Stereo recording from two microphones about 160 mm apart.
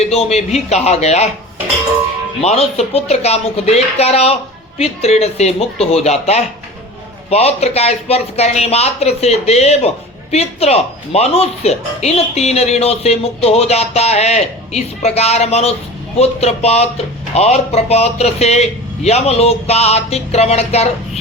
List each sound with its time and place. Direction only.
0.0 s speech: 40° left (ahead or behind)
2.4 s speech: 40° left (ahead or behind)